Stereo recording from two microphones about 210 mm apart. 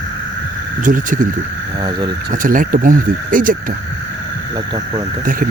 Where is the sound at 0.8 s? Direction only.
40° right (ahead or behind).